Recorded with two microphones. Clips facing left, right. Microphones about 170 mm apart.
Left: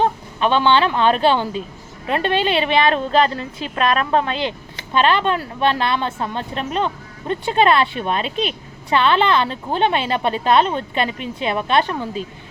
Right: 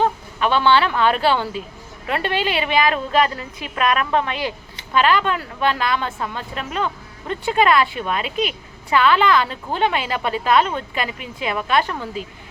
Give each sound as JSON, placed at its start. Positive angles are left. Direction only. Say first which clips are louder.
{"t": 0.0, "sound": "a woman's voice", "louder": "left 1 dB", "side_deg": 20}